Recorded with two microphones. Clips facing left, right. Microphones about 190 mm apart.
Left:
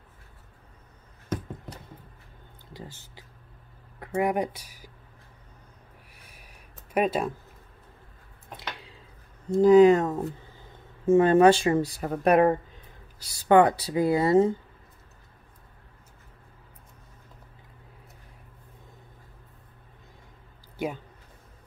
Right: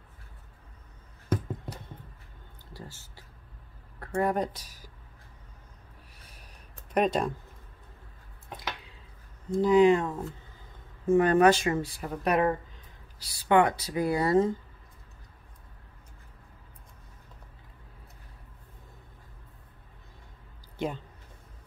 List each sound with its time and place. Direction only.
2.7 s speech: 15° left (ahead or behind)
6.2 s a sound: 10° left (ahead or behind)
9.6 s speech: 45° left (ahead or behind)
11.1 s speech: 25° left (ahead or behind); by 12.5 s 50° left (ahead or behind)
13.3 s speech: 40° left (ahead or behind)